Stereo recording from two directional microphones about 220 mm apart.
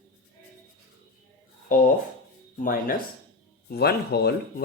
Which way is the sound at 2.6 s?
40° left (ahead or behind).